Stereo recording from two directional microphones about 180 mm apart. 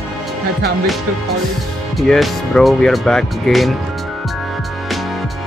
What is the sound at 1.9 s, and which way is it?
Speech, centre (ahead or behind).